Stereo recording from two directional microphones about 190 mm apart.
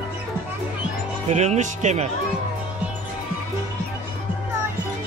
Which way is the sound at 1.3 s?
35° right (ahead or behind).